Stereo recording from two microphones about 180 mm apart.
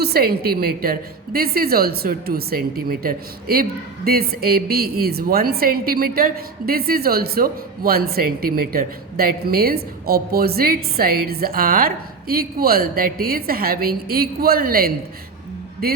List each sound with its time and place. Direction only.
0.0 s a woman's voice: 60° right (ahead or behind)